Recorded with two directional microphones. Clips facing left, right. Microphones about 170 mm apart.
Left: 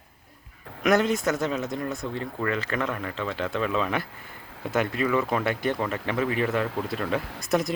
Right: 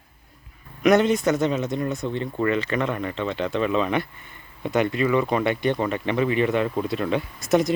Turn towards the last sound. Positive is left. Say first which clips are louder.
# right 5 dB
turn(degrees=0)  # may be behind; listen again after turning